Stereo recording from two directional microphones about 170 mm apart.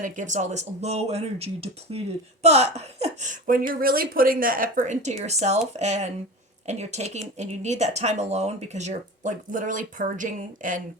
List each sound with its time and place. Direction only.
0.0 s speech: 45° right (ahead or behind)